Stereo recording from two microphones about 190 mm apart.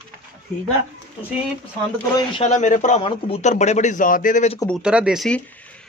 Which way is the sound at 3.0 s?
30° left (ahead or behind).